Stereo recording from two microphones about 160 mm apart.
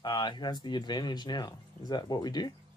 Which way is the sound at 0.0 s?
25° left (ahead or behind).